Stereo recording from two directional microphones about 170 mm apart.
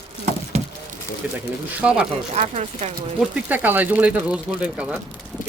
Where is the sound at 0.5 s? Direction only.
40° right (ahead or behind).